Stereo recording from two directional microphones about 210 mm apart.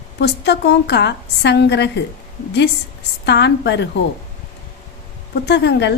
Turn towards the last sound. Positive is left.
turn(degrees=55)  # may be behind; listen again after turning